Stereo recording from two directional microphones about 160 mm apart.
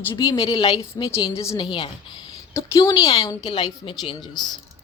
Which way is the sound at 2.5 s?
20° left (ahead or behind).